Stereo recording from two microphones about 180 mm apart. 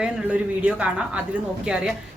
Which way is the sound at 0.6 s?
5° right (ahead or behind).